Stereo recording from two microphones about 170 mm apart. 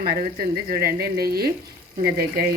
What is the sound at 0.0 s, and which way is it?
Speech, 60° right (ahead or behind).